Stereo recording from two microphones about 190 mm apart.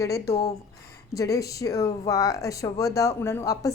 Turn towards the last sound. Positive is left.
turn(degrees=15)  # may be behind; listen again after turning